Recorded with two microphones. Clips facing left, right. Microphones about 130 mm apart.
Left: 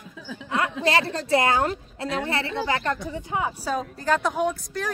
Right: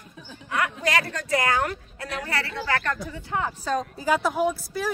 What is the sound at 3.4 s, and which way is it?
Speech, 5° left (ahead or behind).